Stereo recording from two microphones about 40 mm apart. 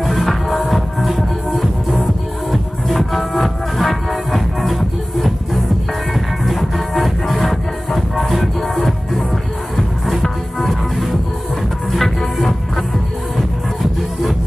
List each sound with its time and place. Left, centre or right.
0.0 s music: centre